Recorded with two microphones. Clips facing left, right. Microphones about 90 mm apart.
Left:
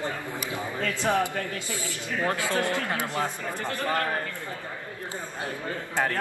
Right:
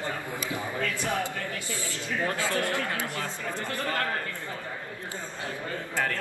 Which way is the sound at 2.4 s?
20° left (ahead or behind).